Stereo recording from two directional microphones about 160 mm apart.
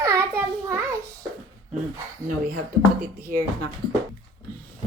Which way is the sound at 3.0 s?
70° right (ahead or behind).